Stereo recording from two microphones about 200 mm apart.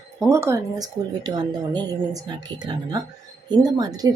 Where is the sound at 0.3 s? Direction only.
15° right (ahead or behind).